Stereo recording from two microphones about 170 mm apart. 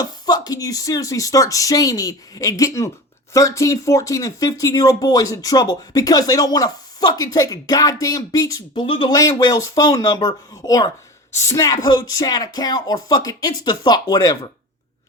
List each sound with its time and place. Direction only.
0.0 s speech: 25° left (ahead or behind)